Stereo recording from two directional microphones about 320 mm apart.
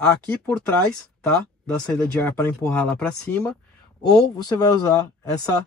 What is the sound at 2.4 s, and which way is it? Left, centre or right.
Speech, centre.